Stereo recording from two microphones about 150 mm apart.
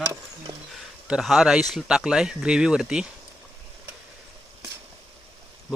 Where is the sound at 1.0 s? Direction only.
5° right (ahead or behind).